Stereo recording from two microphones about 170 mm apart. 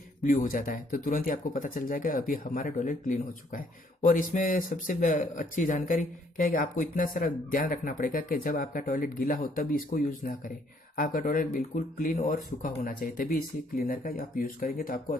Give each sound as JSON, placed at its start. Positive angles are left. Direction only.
{"t": 0.2, "sound": "speech", "side_deg": 55}